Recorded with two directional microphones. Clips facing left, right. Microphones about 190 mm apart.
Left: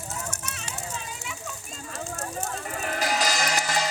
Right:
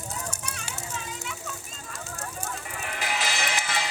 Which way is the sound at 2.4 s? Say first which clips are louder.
Left 4 dB; 40° left (ahead or behind).